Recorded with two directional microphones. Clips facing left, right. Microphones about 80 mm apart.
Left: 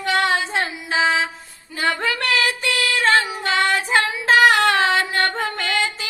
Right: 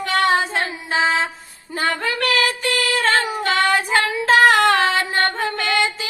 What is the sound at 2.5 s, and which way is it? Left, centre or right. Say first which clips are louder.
Female singing: right 1 dB; right.